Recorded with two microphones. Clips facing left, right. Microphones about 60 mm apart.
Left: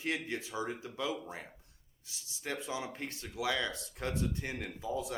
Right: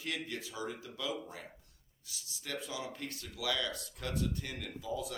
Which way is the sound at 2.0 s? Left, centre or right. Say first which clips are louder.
Left 4 dB; left.